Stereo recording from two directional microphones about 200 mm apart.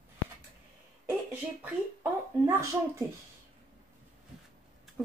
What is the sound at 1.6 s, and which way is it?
Speech, 10° right (ahead or behind).